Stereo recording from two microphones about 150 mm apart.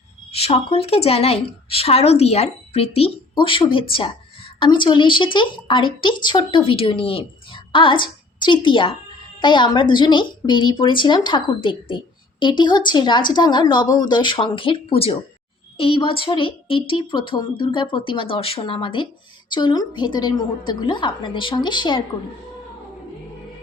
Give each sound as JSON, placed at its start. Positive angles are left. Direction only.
{"t": 0.3, "sound": "a woman's voice", "side_deg": 40}